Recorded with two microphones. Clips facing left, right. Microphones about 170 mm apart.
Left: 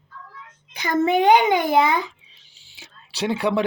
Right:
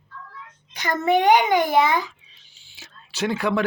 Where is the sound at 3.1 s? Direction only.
30° left (ahead or behind).